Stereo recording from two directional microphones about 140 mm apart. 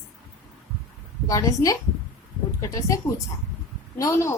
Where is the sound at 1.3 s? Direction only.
25° left (ahead or behind).